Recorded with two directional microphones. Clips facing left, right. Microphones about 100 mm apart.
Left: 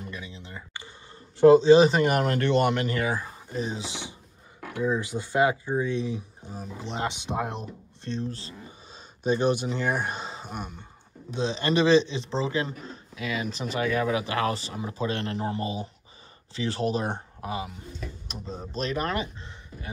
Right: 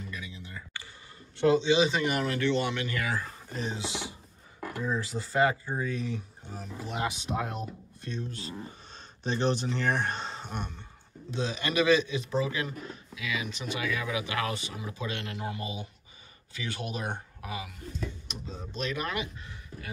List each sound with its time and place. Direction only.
0.1 s a sound: 30° left (ahead or behind)
1.6 s speech: 40° left (ahead or behind)
3.1 s speech: 20° left (ahead or behind)
4.6 s a sound: centre (ahead or behind)
4.9 s speech: 20° left (ahead or behind)
8.9 s speech: 10° left (ahead or behind)
11.3 s speech: 25° left (ahead or behind)